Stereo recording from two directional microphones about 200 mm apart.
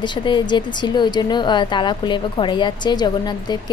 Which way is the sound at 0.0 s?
25° left (ahead or behind).